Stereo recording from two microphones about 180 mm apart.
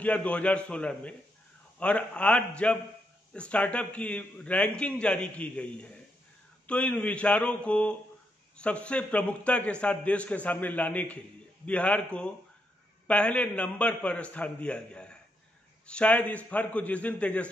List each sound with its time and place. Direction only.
0.0 s a man's voice: 5° left (ahead or behind)